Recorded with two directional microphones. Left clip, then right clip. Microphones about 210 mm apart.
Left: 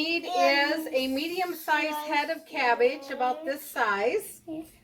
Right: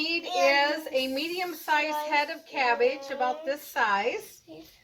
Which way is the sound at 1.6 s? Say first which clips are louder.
Right 2 dB; 15° left (ahead or behind).